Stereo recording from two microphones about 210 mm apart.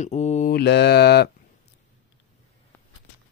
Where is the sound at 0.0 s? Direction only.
35° left (ahead or behind).